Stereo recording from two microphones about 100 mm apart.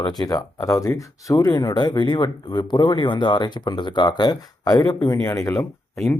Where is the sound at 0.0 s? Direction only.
40° left (ahead or behind).